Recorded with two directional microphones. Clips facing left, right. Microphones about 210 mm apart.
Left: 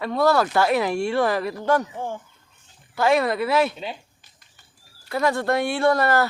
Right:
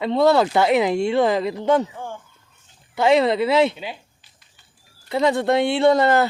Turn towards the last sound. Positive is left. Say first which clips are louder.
# right 4 dB
turn(degrees=-20)  # may be behind; listen again after turning